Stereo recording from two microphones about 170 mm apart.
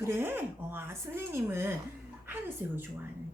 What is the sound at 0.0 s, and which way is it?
Speech, 15° right (ahead or behind).